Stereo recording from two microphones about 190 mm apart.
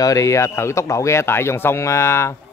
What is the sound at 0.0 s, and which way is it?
Speech, 15° left (ahead or behind).